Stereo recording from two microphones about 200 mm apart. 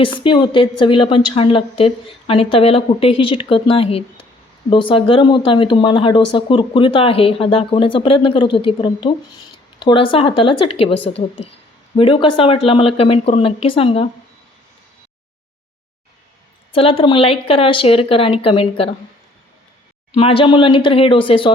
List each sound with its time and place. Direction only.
0.0 s speech: 25° left (ahead or behind)
16.7 s speech: 25° left (ahead or behind)
20.1 s speech: 25° left (ahead or behind)